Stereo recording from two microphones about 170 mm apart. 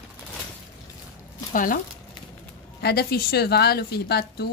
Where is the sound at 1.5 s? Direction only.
55° left (ahead or behind).